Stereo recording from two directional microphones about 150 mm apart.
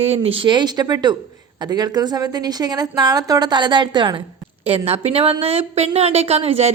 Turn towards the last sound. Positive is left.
turn(degrees=-45)  # may be behind; listen again after turning